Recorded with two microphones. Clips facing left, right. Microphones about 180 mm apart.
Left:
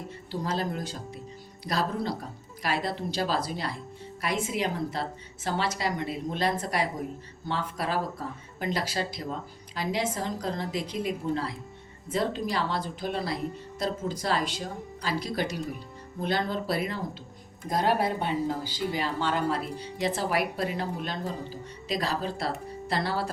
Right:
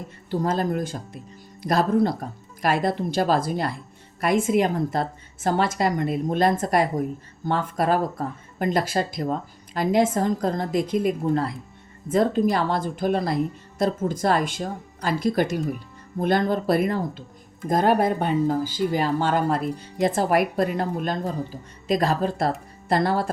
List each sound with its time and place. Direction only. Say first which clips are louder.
0.3 s a woman's voice: right 7 dB; 50° right (ahead or behind)